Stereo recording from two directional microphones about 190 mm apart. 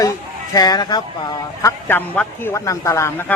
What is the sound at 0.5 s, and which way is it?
Speech, 20° left (ahead or behind).